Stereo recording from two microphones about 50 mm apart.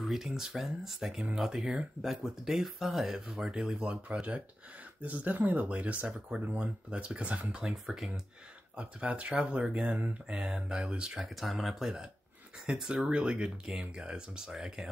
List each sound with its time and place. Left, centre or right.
0.0 s speech: centre
4.1 s speech: right
7.5 s speech: centre
8.7 s speech: right
11.1 s speech: centre